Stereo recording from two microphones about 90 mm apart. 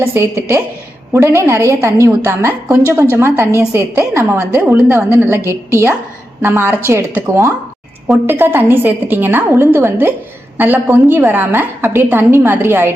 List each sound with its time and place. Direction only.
0.0 s a woman's voice: 30° right (ahead or behind)